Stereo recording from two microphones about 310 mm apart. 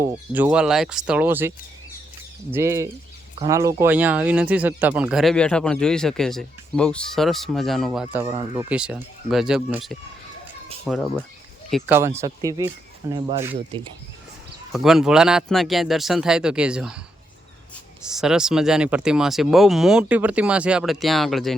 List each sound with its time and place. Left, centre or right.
0.0 s speech: centre
14.7 s speech: centre
18.0 s speech: centre